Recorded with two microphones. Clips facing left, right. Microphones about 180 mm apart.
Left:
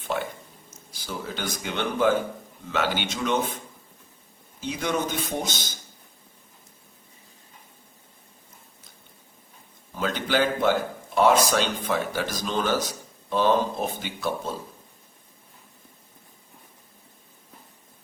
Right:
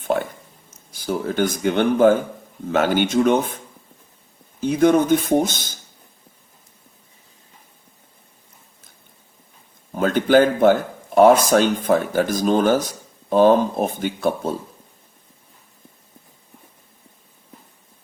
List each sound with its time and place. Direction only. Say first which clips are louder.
0.0 s speech: right 7 dB; 50° right (ahead or behind)
4.6 s speech: right 12 dB; 50° right (ahead or behind)
9.9 s speech: right 10 dB; 50° right (ahead or behind)